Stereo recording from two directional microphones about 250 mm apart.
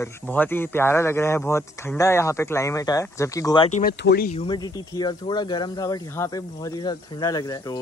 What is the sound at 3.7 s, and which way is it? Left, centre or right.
Speech, left.